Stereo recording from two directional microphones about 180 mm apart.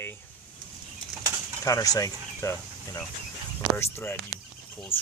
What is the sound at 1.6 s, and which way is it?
Speech, 20° left (ahead or behind).